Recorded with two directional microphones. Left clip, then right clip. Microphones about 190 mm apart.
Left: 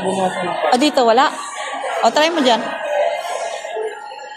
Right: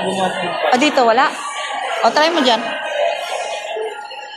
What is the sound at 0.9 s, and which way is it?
A woman's voice, 35° left (ahead or behind).